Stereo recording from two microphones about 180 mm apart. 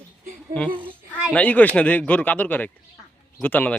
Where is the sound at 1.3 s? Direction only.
10° left (ahead or behind).